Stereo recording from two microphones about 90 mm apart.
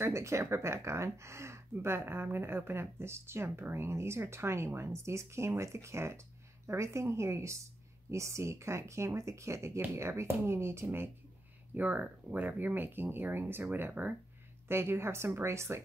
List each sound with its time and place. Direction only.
0.0 s speech: 30° right (ahead or behind)